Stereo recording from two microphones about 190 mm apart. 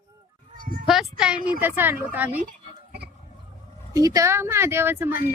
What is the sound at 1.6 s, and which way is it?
Speech, 10° right (ahead or behind).